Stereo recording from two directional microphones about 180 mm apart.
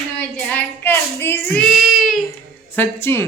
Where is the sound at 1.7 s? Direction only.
Centre (ahead or behind).